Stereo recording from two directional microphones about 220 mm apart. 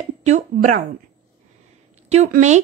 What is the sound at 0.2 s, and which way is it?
Speech, 35° right (ahead or behind).